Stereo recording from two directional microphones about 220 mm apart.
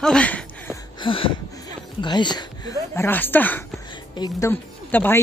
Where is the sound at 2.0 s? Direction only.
20° left (ahead or behind).